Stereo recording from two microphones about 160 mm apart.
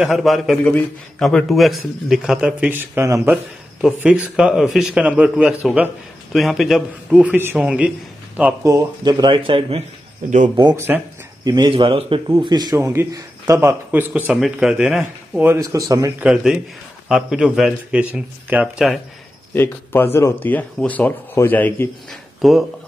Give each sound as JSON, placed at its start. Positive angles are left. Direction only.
{"t": 0.0, "sound": "a man's voice", "side_deg": 0}
{"t": 8.6, "sound": "speech", "side_deg": -25}
{"t": 10.5, "sound": "a man's voice", "side_deg": -25}
{"t": 16.2, "sound": "a man's voice", "side_deg": -5}
{"t": 19.5, "sound": "a man's voice", "side_deg": 15}
{"t": 22.4, "sound": "speech", "side_deg": 0}